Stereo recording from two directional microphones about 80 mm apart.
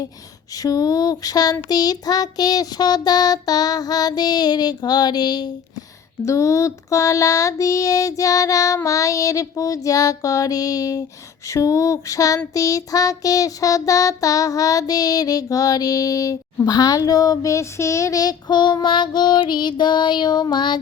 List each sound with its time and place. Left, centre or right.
0.5 s child singing: left
6.2 s child singing: left